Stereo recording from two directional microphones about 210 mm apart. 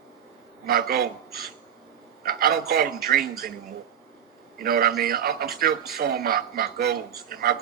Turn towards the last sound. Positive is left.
turn(degrees=-45)  # may be behind; listen again after turning